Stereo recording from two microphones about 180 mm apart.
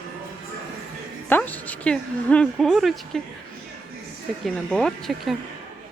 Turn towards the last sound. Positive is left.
turn(degrees=0)  # may be behind; listen again after turning